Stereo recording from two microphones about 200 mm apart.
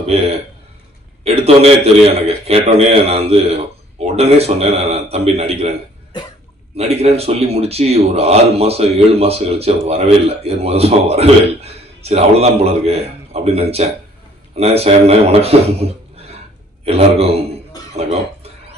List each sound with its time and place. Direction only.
0.0 s a man's voice: 30° right (ahead or behind)
6.8 s a man's voice: 30° right (ahead or behind)